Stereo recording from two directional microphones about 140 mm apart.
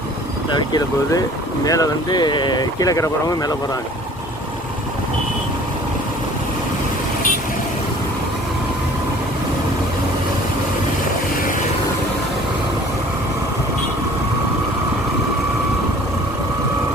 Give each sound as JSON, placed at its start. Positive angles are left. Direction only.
{"t": 0.5, "sound": "speech", "side_deg": 30}